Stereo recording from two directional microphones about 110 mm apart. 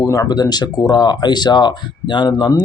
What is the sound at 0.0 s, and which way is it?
Speech, 30° left (ahead or behind).